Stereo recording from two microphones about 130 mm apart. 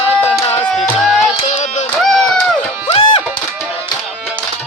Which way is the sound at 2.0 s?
Centre (ahead or behind).